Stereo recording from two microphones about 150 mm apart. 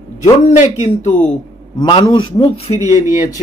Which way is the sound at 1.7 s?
30° left (ahead or behind).